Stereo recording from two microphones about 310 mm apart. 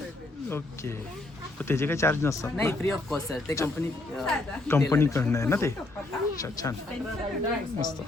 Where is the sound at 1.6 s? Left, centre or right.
Centre.